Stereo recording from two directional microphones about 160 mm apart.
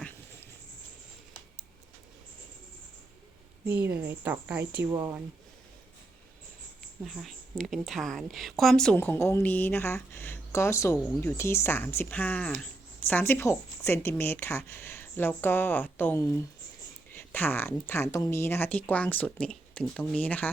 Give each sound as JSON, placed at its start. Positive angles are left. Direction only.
{"t": 3.7, "sound": "a woman's voice", "side_deg": -10}
{"t": 7.0, "sound": "a woman's voice", "side_deg": 0}